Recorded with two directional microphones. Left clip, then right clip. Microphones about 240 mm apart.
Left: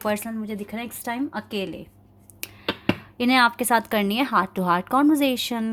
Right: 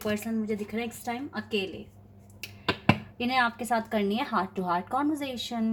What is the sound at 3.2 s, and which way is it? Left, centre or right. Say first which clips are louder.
A woman's voice: left 7 dB; left.